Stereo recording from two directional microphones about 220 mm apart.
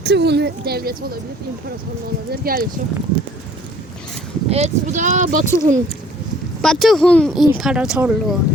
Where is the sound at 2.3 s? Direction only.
40° right (ahead or behind).